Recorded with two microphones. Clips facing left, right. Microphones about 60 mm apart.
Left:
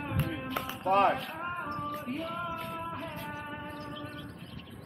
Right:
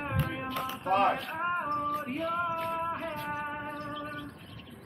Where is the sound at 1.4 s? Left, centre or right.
Right.